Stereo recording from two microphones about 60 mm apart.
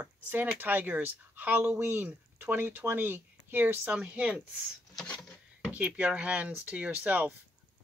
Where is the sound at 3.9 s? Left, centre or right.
Right.